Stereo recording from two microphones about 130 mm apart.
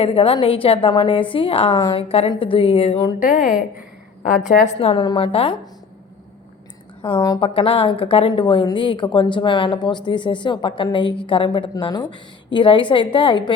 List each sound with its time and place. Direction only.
0.0 s a woman's voice: 50° left (ahead or behind)
3.2 s a woman's voice: 90° left; by 5.0 s 50° left (ahead or behind)
5.0 s speech: 40° left (ahead or behind)
7.2 s a woman's voice: 30° left (ahead or behind)
7.4 s a woman's voice: 45° left (ahead or behind)